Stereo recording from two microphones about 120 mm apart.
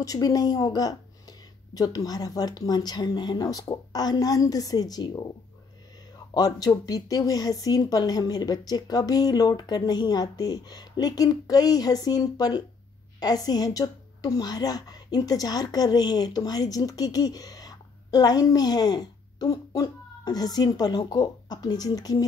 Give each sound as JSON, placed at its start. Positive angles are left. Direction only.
{"t": 0.0, "sound": "speech", "side_deg": 30}
{"t": 6.3, "sound": "a woman's voice", "side_deg": 35}